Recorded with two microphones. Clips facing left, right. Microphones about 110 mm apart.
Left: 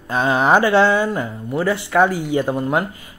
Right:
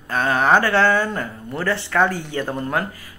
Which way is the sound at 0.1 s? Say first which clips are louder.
Left 2 dB; 15° left (ahead or behind).